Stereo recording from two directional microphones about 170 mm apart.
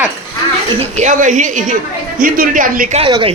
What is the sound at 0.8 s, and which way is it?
A woman's voice, 45° right (ahead or behind).